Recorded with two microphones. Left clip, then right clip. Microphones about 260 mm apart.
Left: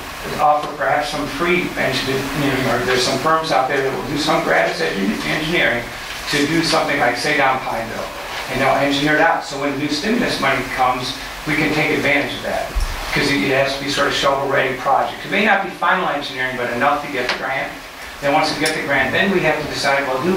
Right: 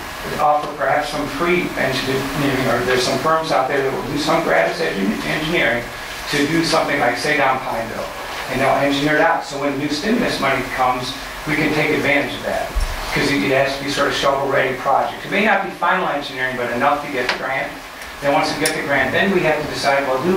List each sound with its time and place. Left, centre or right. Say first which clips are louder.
0.4 s speech: left 1 dB; centre
8.5 s speech: even; centre
14.3 s speech: even; centre